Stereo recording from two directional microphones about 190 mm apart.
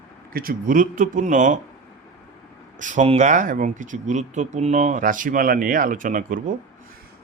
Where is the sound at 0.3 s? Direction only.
50° right (ahead or behind).